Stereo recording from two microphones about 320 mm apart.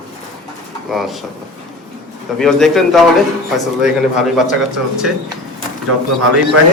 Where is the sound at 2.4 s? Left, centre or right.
Centre.